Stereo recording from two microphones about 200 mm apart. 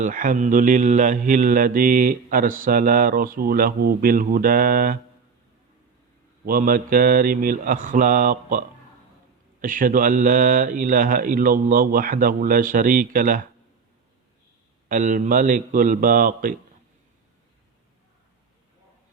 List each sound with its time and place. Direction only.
0.0 s mantra: 40° right (ahead or behind)
6.4 s mantra: 45° right (ahead or behind)
14.8 s a man's voice: 40° right (ahead or behind)